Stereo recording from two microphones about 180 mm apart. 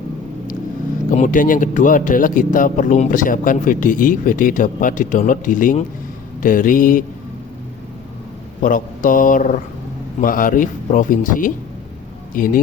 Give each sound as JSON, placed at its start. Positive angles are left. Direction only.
{"t": 1.1, "sound": "speech", "side_deg": 45}
{"t": 8.6, "sound": "speech", "side_deg": 50}